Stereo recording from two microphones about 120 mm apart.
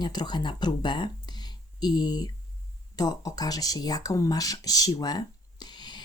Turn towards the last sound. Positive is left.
turn(degrees=40)  # may be behind; listen again after turning